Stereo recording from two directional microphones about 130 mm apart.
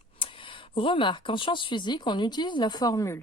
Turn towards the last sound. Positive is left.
turn(degrees=25)  # may be behind; listen again after turning